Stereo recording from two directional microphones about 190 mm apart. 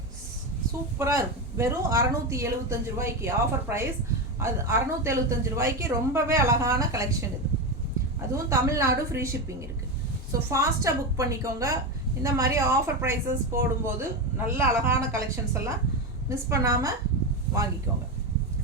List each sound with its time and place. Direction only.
0.9 s speech: 15° right (ahead or behind)
8.4 s speech: 15° right (ahead or behind)